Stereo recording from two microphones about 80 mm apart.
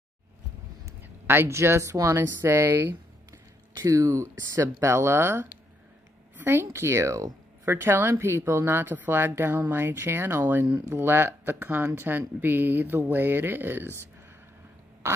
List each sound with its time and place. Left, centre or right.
1.0 s a woman's voice: right
3.7 s a woman's voice: right
15.0 s a sound: right